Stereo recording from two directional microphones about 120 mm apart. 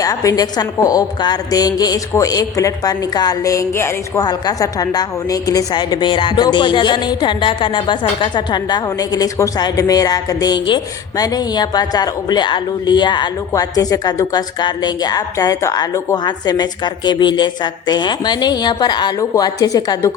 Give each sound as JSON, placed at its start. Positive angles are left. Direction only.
{"t": 0.0, "sound": "a woman's voice", "side_deg": 30}
{"t": 4.2, "sound": "a woman's voice", "side_deg": 35}